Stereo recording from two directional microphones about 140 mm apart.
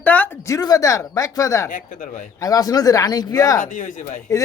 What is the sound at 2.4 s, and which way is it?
Speech, 25° left (ahead or behind).